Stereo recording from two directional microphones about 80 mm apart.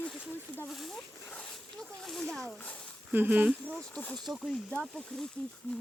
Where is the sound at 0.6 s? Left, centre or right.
Centre.